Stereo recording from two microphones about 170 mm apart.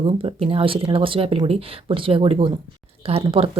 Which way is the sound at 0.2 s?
35° right (ahead or behind).